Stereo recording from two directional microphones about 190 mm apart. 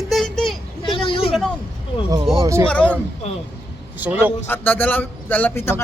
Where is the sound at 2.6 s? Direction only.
5° left (ahead or behind).